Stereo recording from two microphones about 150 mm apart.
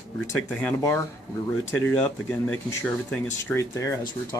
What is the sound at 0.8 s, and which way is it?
Speech, 20° left (ahead or behind).